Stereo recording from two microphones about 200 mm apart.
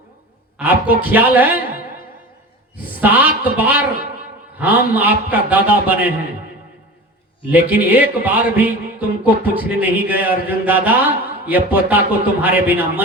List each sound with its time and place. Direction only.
0.6 s speech: 10° right (ahead or behind)
3.0 s speech: 10° right (ahead or behind)
7.5 s speech: 10° right (ahead or behind)